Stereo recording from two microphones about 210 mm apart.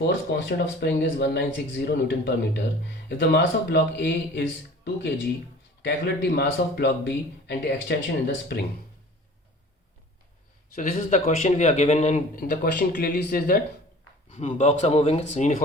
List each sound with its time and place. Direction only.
0.3 s a man's voice: 55° left (ahead or behind)
5.8 s a man's voice: 50° left (ahead or behind)
10.8 s speech: 35° left (ahead or behind)